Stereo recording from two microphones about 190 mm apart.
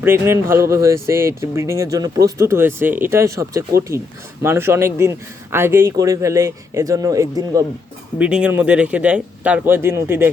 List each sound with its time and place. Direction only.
0.0 s speech: 10° right (ahead or behind)
8.2 s speech: 5° right (ahead or behind)